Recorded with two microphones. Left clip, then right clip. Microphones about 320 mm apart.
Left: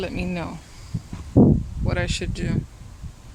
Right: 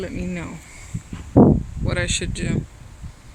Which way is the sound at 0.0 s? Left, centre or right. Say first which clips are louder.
Left 1 dB; centre.